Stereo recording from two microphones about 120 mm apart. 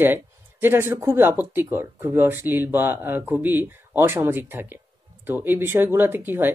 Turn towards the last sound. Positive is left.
turn(degrees=-15)  # may be behind; listen again after turning